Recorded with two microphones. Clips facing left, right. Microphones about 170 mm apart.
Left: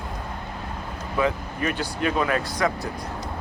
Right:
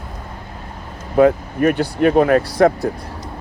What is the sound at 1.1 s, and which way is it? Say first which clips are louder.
Speech: right 11 dB; 55° right (ahead or behind).